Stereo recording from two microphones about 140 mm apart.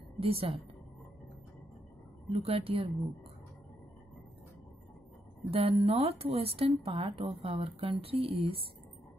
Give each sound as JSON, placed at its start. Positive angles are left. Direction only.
{"t": 0.2, "sound": "speech", "side_deg": -45}
{"t": 2.3, "sound": "speech", "side_deg": -40}
{"t": 5.5, "sound": "speech", "side_deg": -45}